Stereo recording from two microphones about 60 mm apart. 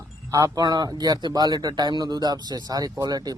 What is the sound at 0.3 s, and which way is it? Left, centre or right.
Speech, right.